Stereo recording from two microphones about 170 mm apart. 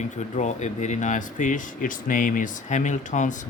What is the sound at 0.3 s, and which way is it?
Speech, 45° left (ahead or behind).